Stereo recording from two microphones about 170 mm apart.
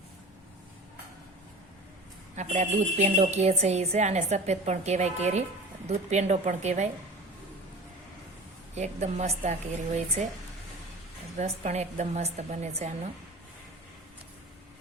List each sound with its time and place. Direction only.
2.3 s a woman's voice: 45° right (ahead or behind)
8.7 s a woman's voice: 40° right (ahead or behind)
11.3 s a woman's voice: 40° right (ahead or behind)